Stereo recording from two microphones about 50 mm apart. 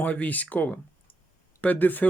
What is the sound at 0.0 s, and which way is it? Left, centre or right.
Speech, left.